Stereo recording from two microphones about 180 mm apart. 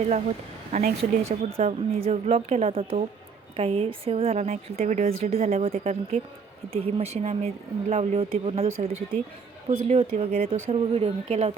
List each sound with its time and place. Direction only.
0.7 s speech: 50° right (ahead or behind)
1.3 s a woman's voice: 35° right (ahead or behind)